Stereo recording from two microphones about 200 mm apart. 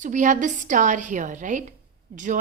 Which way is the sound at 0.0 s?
40° right (ahead or behind).